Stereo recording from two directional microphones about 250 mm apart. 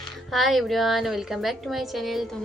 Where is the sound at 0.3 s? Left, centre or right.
Centre.